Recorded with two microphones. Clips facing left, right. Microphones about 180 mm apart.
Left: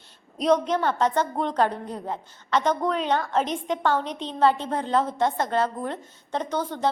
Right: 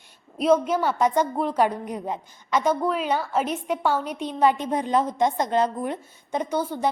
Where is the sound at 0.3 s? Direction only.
5° right (ahead or behind).